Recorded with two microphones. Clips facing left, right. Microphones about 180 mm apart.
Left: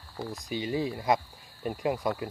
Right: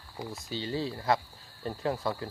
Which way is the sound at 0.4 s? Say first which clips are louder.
Left 3 dB; 15° left (ahead or behind).